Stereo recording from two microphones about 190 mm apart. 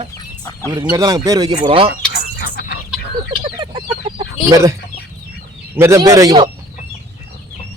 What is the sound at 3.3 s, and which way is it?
Chicken, 25° right (ahead or behind).